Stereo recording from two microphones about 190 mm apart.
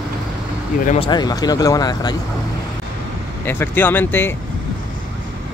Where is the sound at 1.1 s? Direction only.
20° left (ahead or behind).